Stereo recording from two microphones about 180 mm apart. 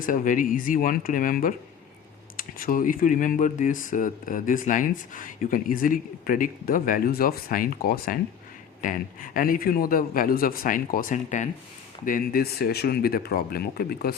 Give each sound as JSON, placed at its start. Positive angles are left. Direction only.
{"t": 0.0, "sound": "speech", "side_deg": 50}